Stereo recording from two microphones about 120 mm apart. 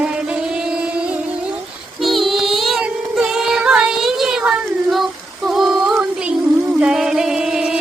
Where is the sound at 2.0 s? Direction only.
Centre (ahead or behind).